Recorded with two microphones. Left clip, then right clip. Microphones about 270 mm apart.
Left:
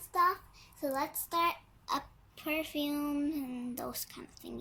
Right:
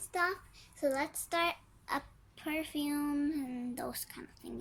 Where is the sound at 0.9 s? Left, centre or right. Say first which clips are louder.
Left 1 dB; right.